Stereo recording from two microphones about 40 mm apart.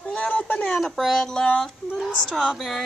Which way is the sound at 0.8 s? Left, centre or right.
Centre.